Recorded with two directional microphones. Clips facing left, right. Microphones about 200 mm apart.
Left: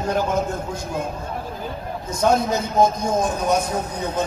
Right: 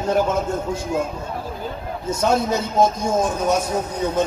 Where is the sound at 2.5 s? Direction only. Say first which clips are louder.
Even; 10° right (ahead or behind).